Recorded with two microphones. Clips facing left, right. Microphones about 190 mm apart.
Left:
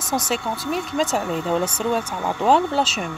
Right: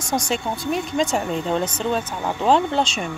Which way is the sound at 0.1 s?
25° right (ahead or behind).